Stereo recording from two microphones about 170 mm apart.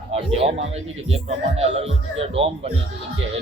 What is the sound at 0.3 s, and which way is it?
Speech, 35° right (ahead or behind).